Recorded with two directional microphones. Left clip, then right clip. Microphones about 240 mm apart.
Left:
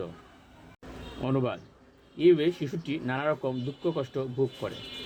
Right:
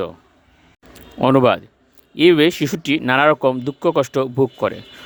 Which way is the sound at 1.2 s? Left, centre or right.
Right.